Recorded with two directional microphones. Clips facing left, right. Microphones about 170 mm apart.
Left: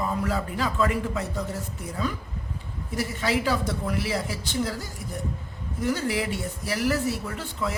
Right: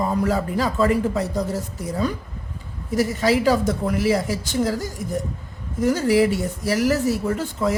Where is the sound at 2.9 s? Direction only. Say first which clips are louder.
Right 7 dB; 40° right (ahead or behind).